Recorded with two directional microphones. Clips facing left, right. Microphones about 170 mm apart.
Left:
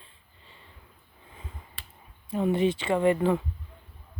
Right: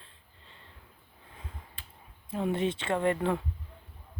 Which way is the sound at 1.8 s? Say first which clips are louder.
Left 3 dB; 80° left.